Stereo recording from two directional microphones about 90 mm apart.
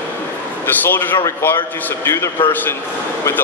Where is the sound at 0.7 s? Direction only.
20° left (ahead or behind).